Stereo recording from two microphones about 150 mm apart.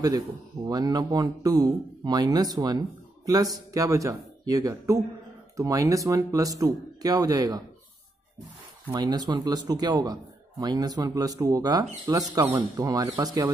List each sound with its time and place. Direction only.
0.7 s speech: 25° right (ahead or behind)
8.9 s speech: 25° right (ahead or behind)